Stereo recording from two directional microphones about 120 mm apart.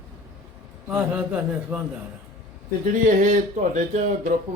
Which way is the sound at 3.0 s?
90° right.